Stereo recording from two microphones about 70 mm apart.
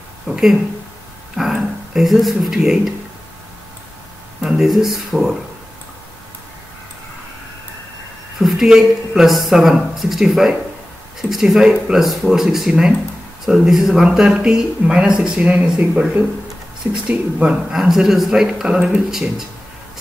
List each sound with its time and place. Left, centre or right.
1.3 s speech: centre
4.4 s a sound: centre
4.6 s speech: centre
8.4 s speech: centre
17.7 s speech: centre